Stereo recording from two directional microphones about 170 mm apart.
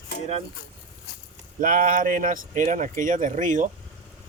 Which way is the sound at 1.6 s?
50° right (ahead or behind).